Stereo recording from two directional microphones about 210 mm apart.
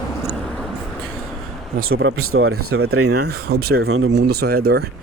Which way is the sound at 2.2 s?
85° right.